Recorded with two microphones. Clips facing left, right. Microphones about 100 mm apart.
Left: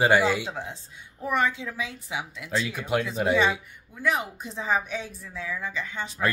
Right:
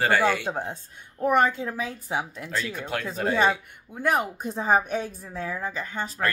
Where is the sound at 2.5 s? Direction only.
10° left (ahead or behind).